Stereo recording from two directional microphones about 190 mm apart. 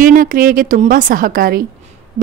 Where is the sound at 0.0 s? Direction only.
45° right (ahead or behind).